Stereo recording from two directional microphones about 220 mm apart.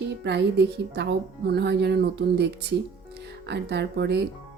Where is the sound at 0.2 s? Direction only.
50° right (ahead or behind).